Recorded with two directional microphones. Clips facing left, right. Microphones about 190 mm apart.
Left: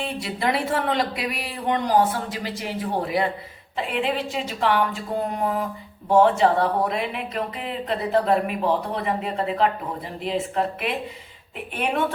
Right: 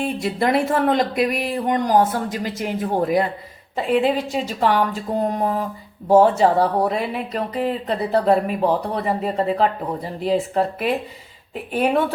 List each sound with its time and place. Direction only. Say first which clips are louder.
0.0 s speech: right 5 dB; 50° right (ahead or behind)